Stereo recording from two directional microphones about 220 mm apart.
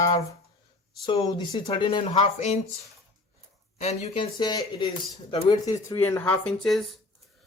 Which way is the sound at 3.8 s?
30° left (ahead or behind).